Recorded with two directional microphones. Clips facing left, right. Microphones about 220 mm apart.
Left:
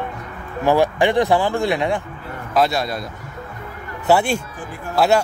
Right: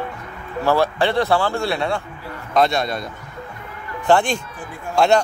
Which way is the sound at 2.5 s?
5° left (ahead or behind).